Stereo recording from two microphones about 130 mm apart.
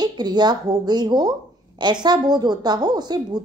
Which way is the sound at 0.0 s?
35° right (ahead or behind).